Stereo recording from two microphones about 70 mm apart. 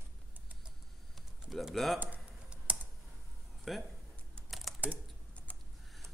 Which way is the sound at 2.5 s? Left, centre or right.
Right.